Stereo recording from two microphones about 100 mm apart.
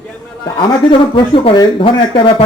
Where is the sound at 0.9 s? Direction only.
60° left (ahead or behind).